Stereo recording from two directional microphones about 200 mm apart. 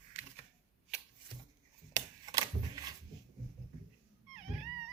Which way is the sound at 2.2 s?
20° right (ahead or behind).